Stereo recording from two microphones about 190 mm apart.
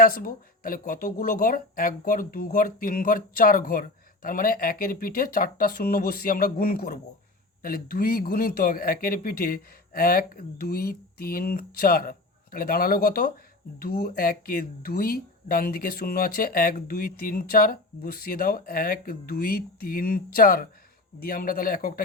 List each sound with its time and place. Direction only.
0.0 s speech: 50° left (ahead or behind)